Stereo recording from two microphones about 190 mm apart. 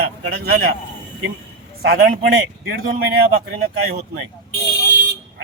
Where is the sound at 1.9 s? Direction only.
50° right (ahead or behind).